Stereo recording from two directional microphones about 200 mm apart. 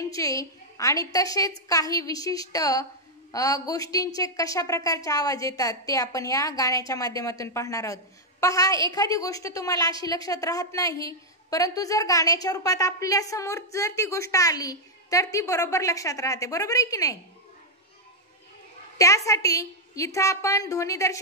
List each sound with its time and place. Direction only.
0.1 s a woman's voice: 15° left (ahead or behind)
18.9 s a woman's voice: 15° left (ahead or behind)